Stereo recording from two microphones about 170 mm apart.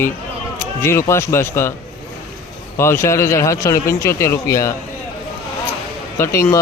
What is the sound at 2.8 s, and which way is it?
Speech, 15° left (ahead or behind).